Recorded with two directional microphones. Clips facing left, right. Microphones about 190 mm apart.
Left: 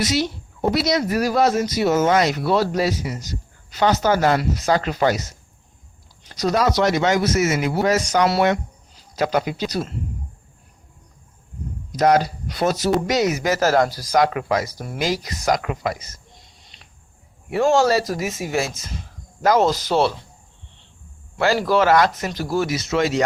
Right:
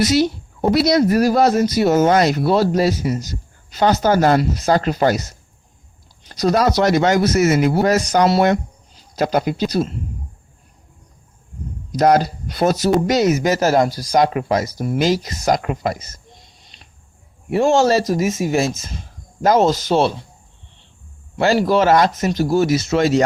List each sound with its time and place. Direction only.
0.0 s speech: 40° right (ahead or behind)
6.2 s speech: 40° right (ahead or behind)
9.6 s speech: 30° right (ahead or behind)
11.9 s speech: 40° right (ahead or behind)
15.6 s speech: 35° right (ahead or behind)
17.5 s speech: 25° right (ahead or behind)
21.3 s speech: 25° right (ahead or behind)